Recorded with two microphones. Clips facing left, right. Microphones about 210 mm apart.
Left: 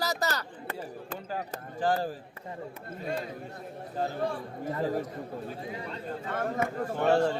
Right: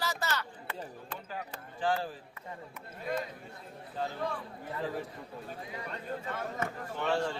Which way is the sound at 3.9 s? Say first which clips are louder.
Left 4 dB; 45° left (ahead or behind).